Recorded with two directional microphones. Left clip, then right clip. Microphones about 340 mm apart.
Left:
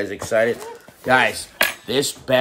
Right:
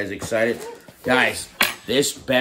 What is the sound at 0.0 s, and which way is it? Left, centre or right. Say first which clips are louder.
Cutlery: left 3 dB; centre.